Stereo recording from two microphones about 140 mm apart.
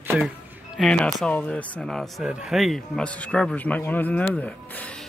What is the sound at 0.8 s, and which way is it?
Speech, 5° left (ahead or behind).